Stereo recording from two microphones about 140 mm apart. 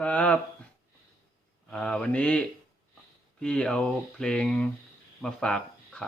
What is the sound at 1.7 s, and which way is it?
Mantra, 5° left (ahead or behind).